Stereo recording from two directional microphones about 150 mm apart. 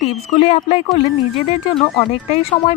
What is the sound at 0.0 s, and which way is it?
Speech, 45° left (ahead or behind).